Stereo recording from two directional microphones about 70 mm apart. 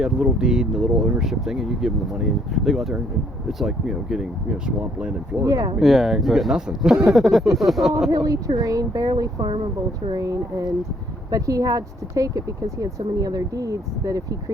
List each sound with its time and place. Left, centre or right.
0.0 s speech: centre
5.4 s speech: right
5.8 s speech: centre
8.1 s speech: right
10.2 s speech: right